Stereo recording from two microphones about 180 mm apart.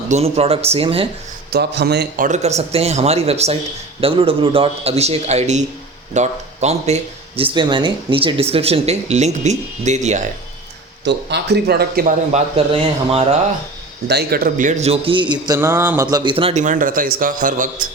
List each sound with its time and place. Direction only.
0.1 s speech: 35° right (ahead or behind)
1.5 s a man's voice: 65° right (ahead or behind)
2.2 s speech: 40° right (ahead or behind)
11.0 s speech: 70° right (ahead or behind)
12.3 s speech: 35° right (ahead or behind)
14.1 s speech: 60° right (ahead or behind); by 15.5 s 25° right (ahead or behind)
15.5 s a sound: 15° right (ahead or behind)
16.0 s a man's voice: 25° right (ahead or behind); by 17.8 s 45° right (ahead or behind)